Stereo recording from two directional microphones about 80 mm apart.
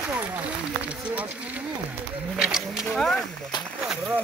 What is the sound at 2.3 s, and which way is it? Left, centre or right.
Wild animals, centre.